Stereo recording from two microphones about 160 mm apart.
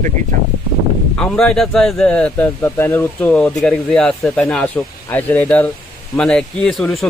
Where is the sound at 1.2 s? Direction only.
5° left (ahead or behind).